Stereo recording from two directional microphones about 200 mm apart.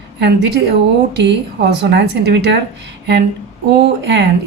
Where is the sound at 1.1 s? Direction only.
55° right (ahead or behind).